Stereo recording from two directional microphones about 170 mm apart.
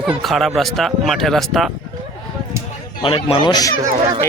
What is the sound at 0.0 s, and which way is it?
Speech, centre (ahead or behind).